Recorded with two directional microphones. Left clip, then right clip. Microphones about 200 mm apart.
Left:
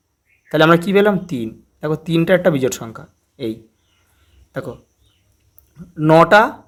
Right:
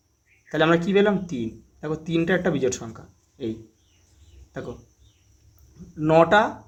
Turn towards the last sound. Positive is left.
turn(degrees=45)  # may be behind; listen again after turning